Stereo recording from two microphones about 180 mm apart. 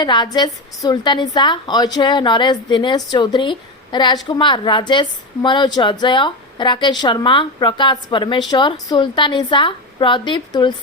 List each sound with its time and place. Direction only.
0.0 s a woman's voice: 25° left (ahead or behind)